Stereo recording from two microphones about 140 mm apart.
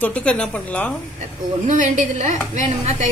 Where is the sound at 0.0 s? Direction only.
10° left (ahead or behind).